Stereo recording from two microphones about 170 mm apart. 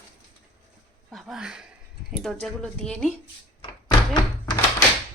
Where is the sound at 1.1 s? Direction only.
5° right (ahead or behind).